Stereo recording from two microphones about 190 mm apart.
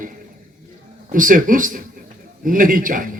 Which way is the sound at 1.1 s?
45° right (ahead or behind).